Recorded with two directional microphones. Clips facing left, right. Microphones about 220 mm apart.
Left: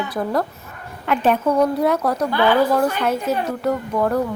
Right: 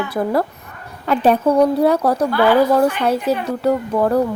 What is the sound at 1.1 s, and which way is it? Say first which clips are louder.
A woman's voice: right 3 dB; 35° right (ahead or behind).